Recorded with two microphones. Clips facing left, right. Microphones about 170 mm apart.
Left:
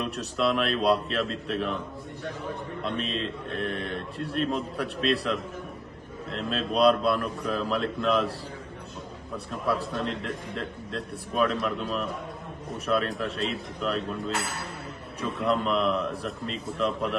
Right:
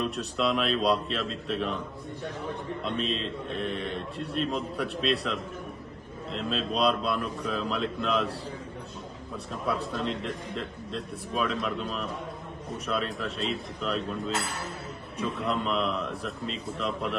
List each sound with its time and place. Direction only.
0.0 s a man's voice: centre (ahead or behind)
2.8 s a man's voice: centre (ahead or behind)
9.7 s a man's voice: centre (ahead or behind)